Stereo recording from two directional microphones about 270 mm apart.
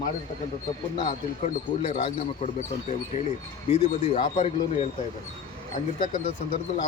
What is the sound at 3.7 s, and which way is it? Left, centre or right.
Speech, left.